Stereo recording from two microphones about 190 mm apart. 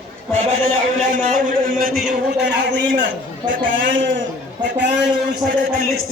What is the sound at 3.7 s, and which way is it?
Speech, 45° right (ahead or behind).